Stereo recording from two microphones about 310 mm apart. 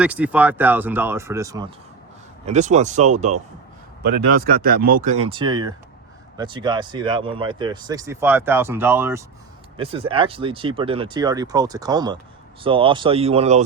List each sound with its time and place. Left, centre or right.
0.0 s speech: centre
2.5 s speech: right